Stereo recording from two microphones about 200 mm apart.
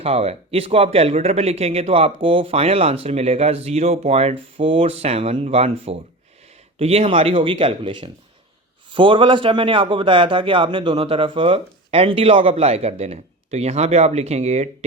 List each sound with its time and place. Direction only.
0.0 s a man's voice: 30° right (ahead or behind)